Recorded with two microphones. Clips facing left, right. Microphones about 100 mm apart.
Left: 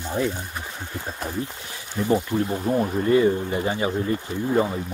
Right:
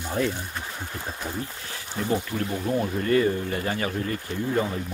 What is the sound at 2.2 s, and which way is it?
Speech, 20° left (ahead or behind).